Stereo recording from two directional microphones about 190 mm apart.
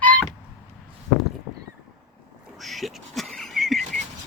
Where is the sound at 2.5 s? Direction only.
Centre (ahead or behind).